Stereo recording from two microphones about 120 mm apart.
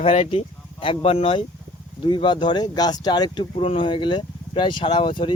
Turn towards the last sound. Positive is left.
turn(degrees=45)  # may be behind; listen again after turning